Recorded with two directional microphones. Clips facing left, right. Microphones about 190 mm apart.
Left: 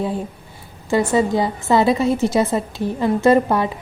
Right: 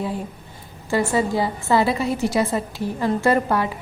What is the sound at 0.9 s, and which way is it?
A woman's voice, 20° left (ahead or behind).